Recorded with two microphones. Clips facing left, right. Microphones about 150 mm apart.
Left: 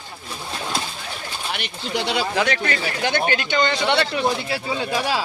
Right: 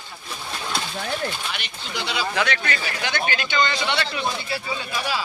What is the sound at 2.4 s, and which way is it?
Speech, 35° left (ahead or behind).